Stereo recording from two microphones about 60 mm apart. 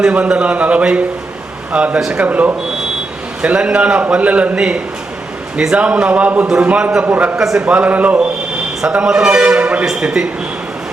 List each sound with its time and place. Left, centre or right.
0.0 s a man's voice: centre
7.3 s speech: centre
7.6 s a man's voice: right
9.8 s speech: centre